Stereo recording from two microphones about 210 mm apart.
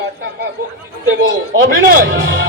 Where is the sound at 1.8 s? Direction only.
50° right (ahead or behind).